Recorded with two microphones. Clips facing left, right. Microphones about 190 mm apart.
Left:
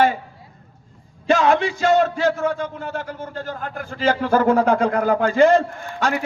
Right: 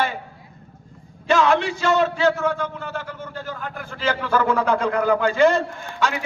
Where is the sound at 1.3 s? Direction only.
50° left (ahead or behind).